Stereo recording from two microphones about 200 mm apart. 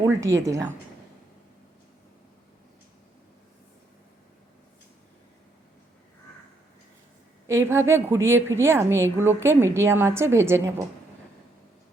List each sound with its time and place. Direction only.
0.0 s a woman's voice: 15° right (ahead or behind)
7.4 s a woman's voice: 15° right (ahead or behind)